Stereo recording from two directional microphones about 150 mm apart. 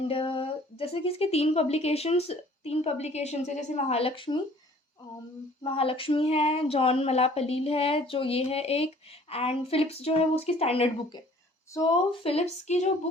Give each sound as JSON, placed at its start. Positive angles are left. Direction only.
{"t": 0.1, "sound": "speech", "side_deg": 35}
{"t": 5.6, "sound": "speech", "side_deg": 35}
{"t": 11.7, "sound": "speech", "side_deg": 25}
{"t": 12.2, "sound": "speech", "side_deg": 40}